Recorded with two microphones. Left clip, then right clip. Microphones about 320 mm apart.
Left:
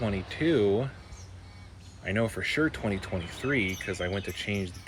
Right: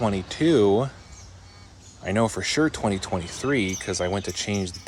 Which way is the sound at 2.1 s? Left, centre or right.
Centre.